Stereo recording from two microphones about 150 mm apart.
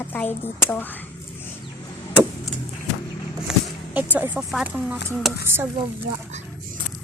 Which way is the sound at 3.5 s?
5° right (ahead or behind).